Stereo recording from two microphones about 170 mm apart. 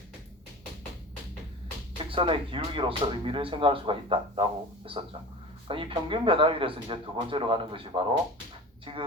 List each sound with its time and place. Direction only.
2.0 s speech: 30° right (ahead or behind)
5.6 s speech: 30° right (ahead or behind)